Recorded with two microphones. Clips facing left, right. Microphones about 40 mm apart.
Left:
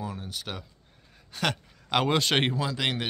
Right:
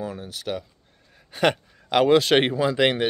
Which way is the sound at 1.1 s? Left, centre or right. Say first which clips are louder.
Right 8 dB; centre.